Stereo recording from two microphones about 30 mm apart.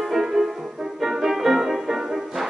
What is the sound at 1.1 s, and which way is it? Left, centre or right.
Music, centre.